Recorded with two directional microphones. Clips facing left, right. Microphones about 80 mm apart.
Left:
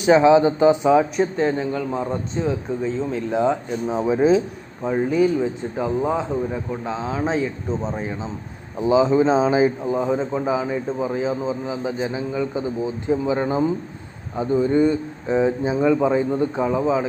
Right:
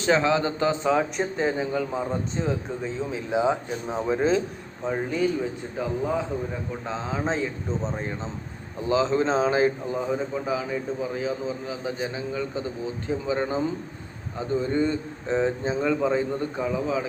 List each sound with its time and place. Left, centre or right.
0.0 s speech: centre
1.1 s speech: centre
5.4 s a man's voice: centre
6.8 s speech: centre
8.8 s speech: centre
9.8 s a man's voice: left
16.6 s a man's voice: left